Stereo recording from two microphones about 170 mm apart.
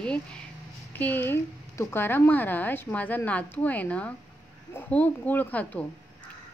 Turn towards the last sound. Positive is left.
turn(degrees=10)  # may be behind; listen again after turning